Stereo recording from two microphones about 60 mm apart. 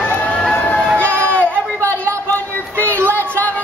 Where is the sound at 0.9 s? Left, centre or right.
Left.